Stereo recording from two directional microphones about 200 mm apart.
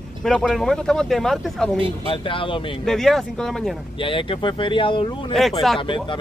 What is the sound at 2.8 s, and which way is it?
Speech, centre (ahead or behind).